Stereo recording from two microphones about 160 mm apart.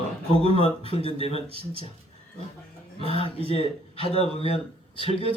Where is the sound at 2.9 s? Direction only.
35° left (ahead or behind).